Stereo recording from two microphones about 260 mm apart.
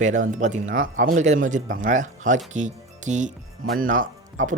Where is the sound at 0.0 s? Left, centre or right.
Right.